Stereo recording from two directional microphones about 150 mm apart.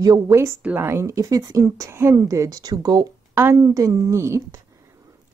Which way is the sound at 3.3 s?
15° right (ahead or behind).